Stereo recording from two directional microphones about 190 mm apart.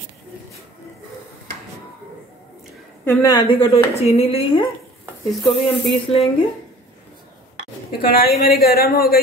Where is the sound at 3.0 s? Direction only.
20° left (ahead or behind).